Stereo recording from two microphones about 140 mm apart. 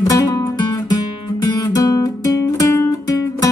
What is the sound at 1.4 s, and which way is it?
Guitar, 25° left (ahead or behind).